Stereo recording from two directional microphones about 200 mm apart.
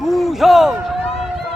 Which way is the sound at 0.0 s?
Centre (ahead or behind).